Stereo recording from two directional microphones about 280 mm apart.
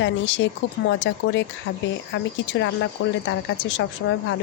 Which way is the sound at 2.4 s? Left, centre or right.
Left.